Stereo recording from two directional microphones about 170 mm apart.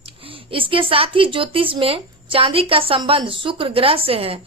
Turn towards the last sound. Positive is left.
turn(degrees=-35)  # may be behind; listen again after turning